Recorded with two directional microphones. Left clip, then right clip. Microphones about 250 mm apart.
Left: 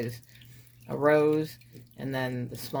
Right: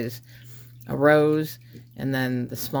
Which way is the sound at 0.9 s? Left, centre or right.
Right.